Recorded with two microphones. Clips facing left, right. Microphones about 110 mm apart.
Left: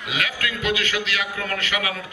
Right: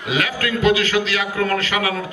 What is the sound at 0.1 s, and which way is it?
A man's voice, 35° right (ahead or behind).